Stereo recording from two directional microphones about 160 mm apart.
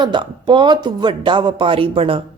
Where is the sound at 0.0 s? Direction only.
30° right (ahead or behind).